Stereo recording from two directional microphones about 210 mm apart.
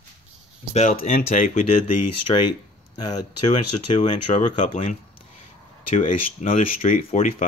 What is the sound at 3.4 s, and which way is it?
Speech, 35° left (ahead or behind).